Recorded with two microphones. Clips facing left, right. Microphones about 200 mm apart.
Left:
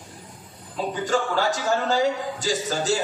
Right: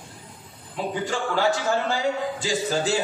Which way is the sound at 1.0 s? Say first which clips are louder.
Left 5 dB; 45° left (ahead or behind).